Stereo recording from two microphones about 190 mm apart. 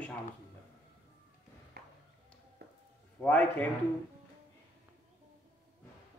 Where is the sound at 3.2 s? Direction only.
10° left (ahead or behind).